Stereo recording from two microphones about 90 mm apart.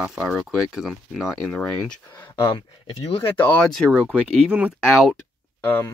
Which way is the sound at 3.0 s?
90° left.